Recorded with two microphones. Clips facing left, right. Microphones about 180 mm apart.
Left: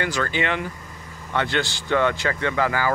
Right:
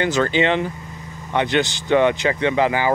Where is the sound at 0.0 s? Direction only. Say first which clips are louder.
Right 6 dB; 20° right (ahead or behind).